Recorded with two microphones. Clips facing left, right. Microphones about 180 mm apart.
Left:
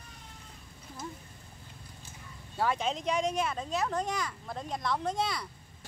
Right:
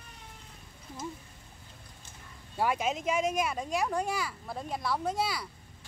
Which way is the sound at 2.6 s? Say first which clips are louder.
Right 1 dB; 10° right (ahead or behind).